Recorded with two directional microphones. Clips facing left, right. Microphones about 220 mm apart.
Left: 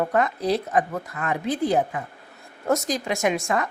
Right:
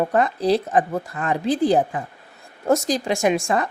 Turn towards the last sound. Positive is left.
turn(degrees=-30)  # may be behind; listen again after turning